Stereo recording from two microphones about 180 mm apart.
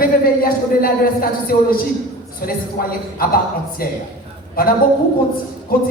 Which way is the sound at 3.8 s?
55° left (ahead or behind).